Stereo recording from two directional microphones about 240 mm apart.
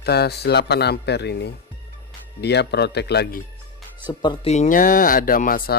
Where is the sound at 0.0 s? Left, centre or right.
Left.